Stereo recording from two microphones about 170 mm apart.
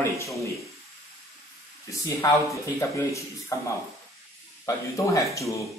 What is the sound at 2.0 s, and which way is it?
Speech, 20° left (ahead or behind).